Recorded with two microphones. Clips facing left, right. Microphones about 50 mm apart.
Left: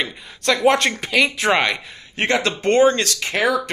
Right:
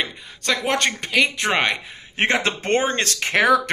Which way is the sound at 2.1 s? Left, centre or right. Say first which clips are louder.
Left 1 dB; right.